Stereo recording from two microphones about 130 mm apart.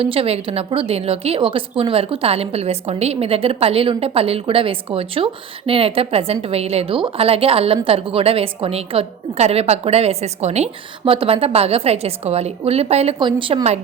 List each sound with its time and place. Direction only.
0.0 s a woman's voice: 45° right (ahead or behind)
13.1 s a woman's voice: 40° right (ahead or behind)